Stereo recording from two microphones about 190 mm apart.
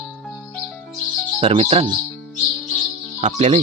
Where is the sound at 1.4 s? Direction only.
35° right (ahead or behind).